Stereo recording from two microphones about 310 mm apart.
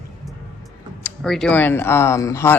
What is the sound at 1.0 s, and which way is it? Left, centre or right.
Speech, centre.